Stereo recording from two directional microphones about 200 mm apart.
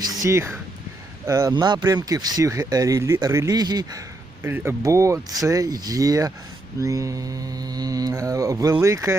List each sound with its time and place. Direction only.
0.2 s mantra: 15° right (ahead or behind)
1.3 s speech: 15° right (ahead or behind)
4.4 s mantra: 10° right (ahead or behind)